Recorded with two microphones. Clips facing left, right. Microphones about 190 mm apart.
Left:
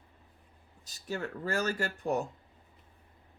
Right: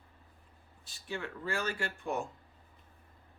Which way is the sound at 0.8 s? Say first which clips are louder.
Left 4 dB; 40° left (ahead or behind).